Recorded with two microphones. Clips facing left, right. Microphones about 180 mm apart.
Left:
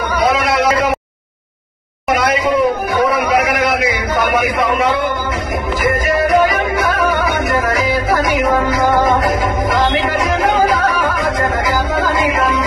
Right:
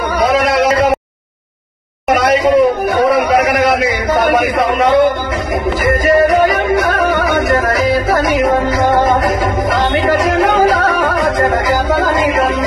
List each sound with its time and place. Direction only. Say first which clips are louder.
0.2 s a sound: right 3 dB; 40° right (ahead or behind)
2.0 s music: right 4 dB; 40° right (ahead or behind)
6.0 s music: right 4 dB; 35° right (ahead or behind)